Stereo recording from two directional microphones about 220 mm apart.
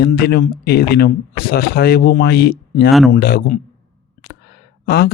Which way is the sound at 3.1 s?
40° left (ahead or behind).